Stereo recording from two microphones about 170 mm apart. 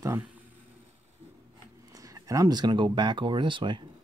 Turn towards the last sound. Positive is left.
turn(degrees=-30)  # may be behind; listen again after turning